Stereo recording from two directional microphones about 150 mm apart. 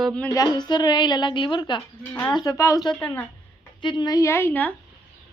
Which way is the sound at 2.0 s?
15° left (ahead or behind).